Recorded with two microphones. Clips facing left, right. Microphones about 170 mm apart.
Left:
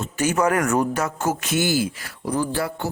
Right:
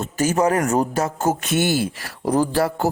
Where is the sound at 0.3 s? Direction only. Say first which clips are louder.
Right 2 dB; 25° right (ahead or behind).